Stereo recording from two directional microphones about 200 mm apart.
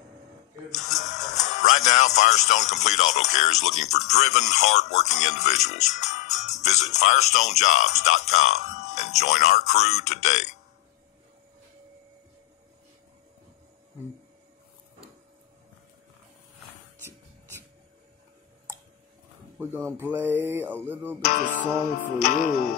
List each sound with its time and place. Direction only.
0.7 s speech: 35° left (ahead or behind)
19.6 s a sound: 10° right (ahead or behind)
21.3 s speech: 40° left (ahead or behind)